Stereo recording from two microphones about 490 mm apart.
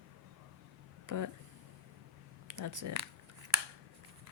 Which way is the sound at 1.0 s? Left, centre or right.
Right.